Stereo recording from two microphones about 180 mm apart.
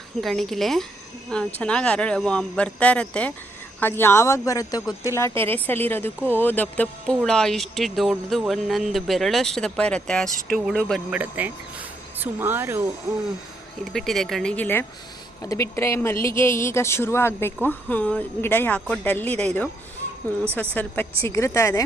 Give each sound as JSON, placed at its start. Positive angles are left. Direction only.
{"t": 0.2, "sound": "speech", "side_deg": 0}
{"t": 11.1, "sound": "speech", "side_deg": -10}
{"t": 13.9, "sound": "speech", "side_deg": 0}
{"t": 20.6, "sound": "speech", "side_deg": 10}